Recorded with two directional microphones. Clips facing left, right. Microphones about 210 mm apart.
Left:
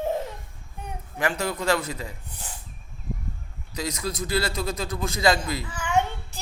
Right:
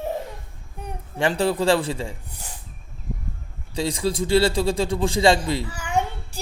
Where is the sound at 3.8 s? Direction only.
30° right (ahead or behind).